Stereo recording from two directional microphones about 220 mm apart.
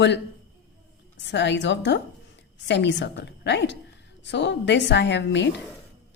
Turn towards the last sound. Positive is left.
turn(degrees=50)  # may be behind; listen again after turning